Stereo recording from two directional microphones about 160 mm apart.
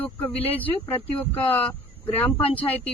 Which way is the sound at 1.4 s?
10° left (ahead or behind).